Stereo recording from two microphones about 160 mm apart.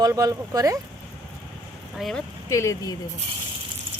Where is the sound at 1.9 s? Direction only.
Centre (ahead or behind).